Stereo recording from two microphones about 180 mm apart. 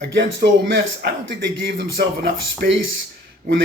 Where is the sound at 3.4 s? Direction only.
50° right (ahead or behind).